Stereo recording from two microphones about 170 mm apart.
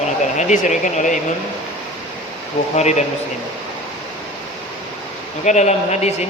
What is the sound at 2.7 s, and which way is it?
Speech, 40° left (ahead or behind).